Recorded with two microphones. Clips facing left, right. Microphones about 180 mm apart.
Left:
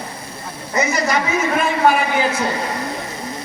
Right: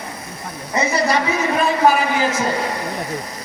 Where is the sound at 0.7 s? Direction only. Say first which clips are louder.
Right 1 dB; 30° right (ahead or behind).